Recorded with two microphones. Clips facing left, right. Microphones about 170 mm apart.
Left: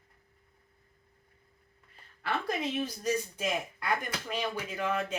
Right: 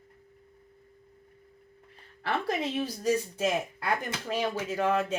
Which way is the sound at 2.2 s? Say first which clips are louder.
Right 3 dB; 30° right (ahead or behind).